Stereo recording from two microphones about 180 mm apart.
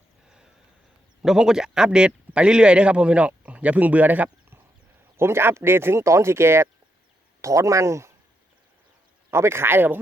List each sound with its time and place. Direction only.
1.2 s a man's voice: 5° right (ahead or behind)
9.3 s speech: 15° right (ahead or behind)